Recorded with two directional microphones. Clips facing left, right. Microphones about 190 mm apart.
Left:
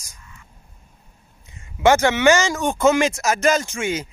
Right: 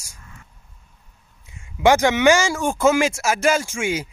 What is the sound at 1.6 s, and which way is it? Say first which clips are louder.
Speech: even; 10° right (ahead or behind).